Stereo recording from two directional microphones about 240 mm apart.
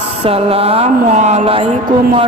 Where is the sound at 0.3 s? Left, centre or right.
Right.